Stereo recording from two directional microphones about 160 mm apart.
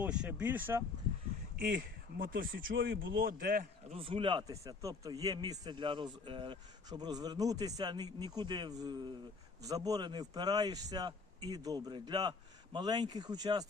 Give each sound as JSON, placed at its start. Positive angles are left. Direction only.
{"t": 0.0, "sound": "speech", "side_deg": -5}
{"t": 1.5, "sound": "speech", "side_deg": -65}
{"t": 3.8, "sound": "speech", "side_deg": -35}